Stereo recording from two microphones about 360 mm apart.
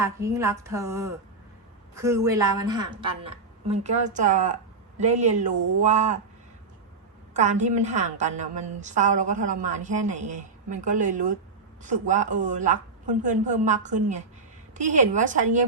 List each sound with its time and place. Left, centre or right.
0.0 s a woman's voice: centre
7.3 s a woman's voice: centre